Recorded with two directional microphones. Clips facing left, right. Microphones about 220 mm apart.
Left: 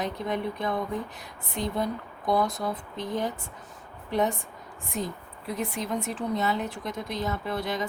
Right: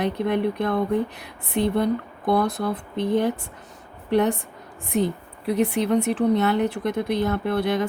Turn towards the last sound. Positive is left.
turn(degrees=-60)  # may be behind; listen again after turning